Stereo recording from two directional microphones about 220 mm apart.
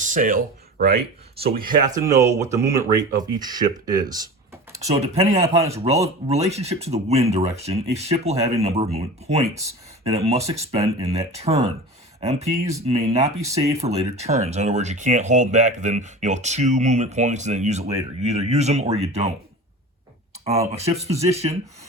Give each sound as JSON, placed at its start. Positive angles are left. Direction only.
{"t": 0.0, "sound": "speech", "side_deg": -35}
{"t": 1.6, "sound": "speech", "side_deg": -15}
{"t": 4.9, "sound": "speech", "side_deg": -30}
{"t": 5.4, "sound": "speech", "side_deg": -15}
{"t": 6.2, "sound": "speech", "side_deg": -30}
{"t": 13.2, "sound": "speech", "side_deg": -15}
{"t": 13.6, "sound": "speech", "side_deg": -30}
{"t": 20.7, "sound": "speech", "side_deg": -30}